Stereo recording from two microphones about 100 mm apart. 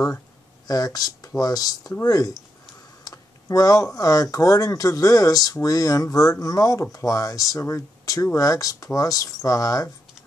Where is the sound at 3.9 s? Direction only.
35° left (ahead or behind).